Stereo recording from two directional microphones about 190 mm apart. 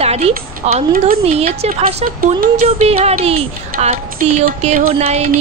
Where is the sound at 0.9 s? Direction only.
50° right (ahead or behind).